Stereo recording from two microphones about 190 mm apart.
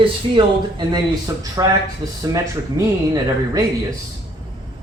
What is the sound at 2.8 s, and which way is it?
Speech, 15° right (ahead or behind).